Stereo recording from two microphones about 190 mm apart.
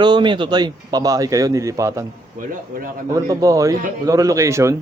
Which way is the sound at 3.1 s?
15° right (ahead or behind).